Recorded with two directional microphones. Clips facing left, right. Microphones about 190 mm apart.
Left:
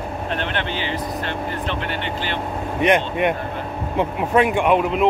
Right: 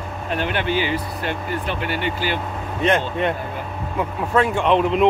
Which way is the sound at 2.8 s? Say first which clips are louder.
Left 2 dB; 15° left (ahead or behind).